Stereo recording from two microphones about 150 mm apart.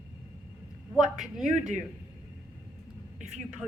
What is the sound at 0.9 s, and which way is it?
Speech, 5° right (ahead or behind).